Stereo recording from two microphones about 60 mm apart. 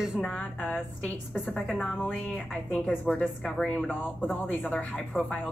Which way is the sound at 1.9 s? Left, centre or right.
Left.